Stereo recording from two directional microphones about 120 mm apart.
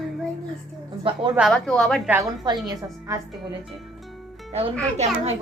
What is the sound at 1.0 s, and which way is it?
Speech, 45° right (ahead or behind).